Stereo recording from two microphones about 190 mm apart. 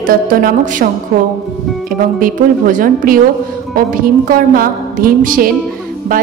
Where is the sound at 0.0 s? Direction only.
50° right (ahead or behind).